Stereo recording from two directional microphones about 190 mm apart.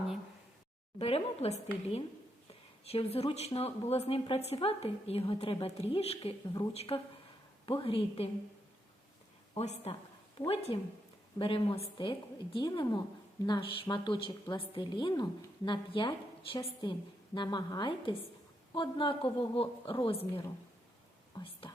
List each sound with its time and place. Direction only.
0.9 s a woman's voice: 30° left (ahead or behind)
9.6 s a woman's voice: 35° left (ahead or behind)